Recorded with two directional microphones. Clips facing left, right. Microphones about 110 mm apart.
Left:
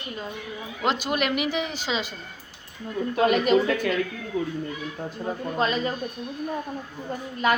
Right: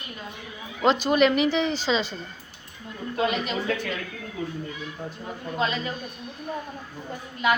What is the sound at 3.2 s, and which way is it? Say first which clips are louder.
Speech: left 5 dB; 50° left (ahead or behind).